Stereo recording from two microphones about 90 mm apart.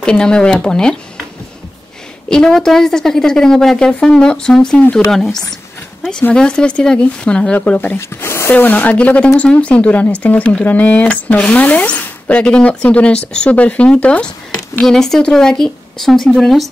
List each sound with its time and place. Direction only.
0.0 s speech: 10° left (ahead or behind)
2.2 s speech: 10° left (ahead or behind)
8.2 s speech: 30° left (ahead or behind); by 16.6 s centre (ahead or behind)